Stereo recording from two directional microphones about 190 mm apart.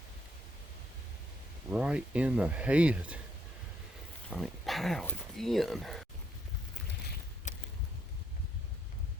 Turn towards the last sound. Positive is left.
turn(degrees=40)  # may be behind; listen again after turning